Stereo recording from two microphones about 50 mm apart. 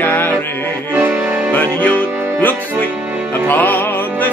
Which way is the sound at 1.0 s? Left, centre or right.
Right.